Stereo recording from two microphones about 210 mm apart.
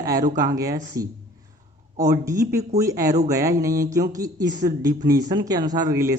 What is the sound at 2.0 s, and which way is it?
Speech, 15° right (ahead or behind).